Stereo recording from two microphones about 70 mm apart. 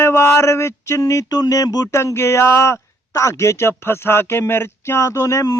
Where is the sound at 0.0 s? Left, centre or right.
Left.